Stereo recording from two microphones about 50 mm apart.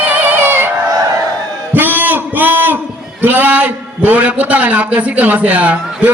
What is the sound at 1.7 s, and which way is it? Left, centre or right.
A man's voice, right.